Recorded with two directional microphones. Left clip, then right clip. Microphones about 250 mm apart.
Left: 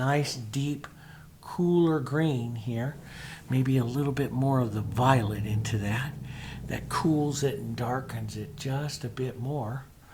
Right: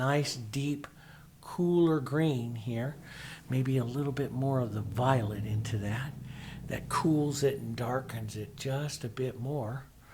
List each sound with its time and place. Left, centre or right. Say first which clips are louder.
0.0 s speech: left 2 dB; right